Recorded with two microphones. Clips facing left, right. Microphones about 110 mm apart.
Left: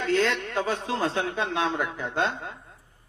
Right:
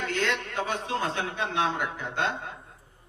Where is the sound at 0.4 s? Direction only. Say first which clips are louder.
Left 3 dB; 35° left (ahead or behind).